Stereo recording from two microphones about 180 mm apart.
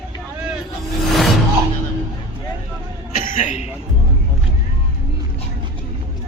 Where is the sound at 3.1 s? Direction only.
45° left (ahead or behind).